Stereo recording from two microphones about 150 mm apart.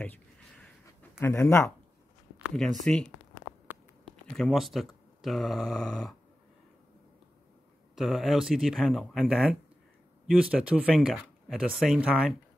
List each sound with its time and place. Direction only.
0.0 s a sound: 10° left (ahead or behind)
1.2 s speech: 15° left (ahead or behind)
2.5 s speech: centre (ahead or behind)
4.3 s speech: 5° left (ahead or behind)
7.9 s speech: centre (ahead or behind)